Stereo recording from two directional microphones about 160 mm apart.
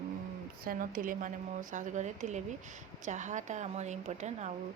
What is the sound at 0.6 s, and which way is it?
Speech, 60° right (ahead or behind).